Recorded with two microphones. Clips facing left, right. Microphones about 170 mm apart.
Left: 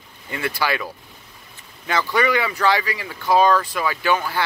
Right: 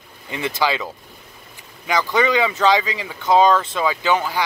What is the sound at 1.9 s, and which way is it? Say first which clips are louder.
Speech: right 2 dB; 15° right (ahead or behind).